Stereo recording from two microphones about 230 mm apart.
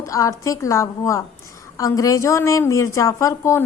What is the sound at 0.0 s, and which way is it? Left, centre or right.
A woman's voice, centre.